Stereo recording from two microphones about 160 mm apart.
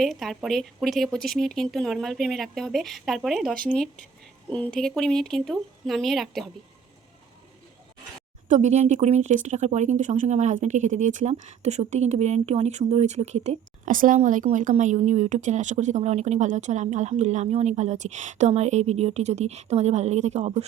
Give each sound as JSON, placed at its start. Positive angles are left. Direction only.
{"t": 0.0, "sound": "speech", "side_deg": 0}
{"t": 4.5, "sound": "speech", "side_deg": 5}
{"t": 8.4, "sound": "speech", "side_deg": -45}
{"t": 13.9, "sound": "speech", "side_deg": -60}